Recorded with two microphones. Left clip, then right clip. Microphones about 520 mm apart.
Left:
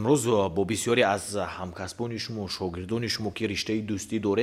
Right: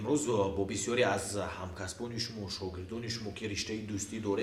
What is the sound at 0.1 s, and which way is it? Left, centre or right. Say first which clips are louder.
Speech: left 7 dB; left.